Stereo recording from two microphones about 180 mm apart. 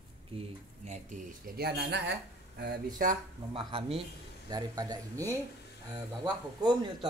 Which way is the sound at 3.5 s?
30° right (ahead or behind).